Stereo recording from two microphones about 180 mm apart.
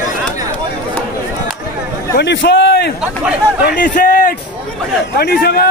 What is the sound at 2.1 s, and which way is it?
Speech, 75° left (ahead or behind).